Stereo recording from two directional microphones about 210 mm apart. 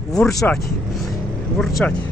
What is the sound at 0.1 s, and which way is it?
Speech, centre (ahead or behind).